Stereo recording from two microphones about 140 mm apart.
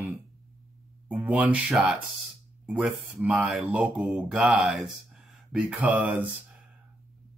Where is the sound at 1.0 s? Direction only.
10° right (ahead or behind).